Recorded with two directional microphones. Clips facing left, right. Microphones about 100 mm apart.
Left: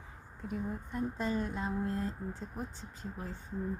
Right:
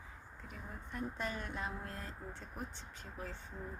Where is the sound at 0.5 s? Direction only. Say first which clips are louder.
Left 10 dB; 25° left (ahead or behind).